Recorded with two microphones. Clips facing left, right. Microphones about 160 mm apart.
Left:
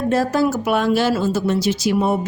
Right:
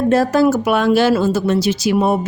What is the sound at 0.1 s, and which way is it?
Speech, 70° right (ahead or behind).